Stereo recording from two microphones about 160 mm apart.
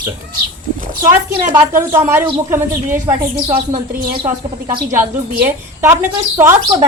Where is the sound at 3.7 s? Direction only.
55° right (ahead or behind).